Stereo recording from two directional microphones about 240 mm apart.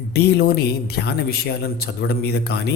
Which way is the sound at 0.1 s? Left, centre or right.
Left.